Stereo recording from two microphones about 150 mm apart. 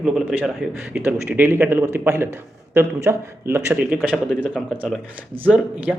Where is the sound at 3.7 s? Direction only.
5° right (ahead or behind).